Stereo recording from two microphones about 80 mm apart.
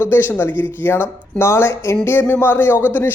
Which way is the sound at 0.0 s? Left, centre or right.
Left.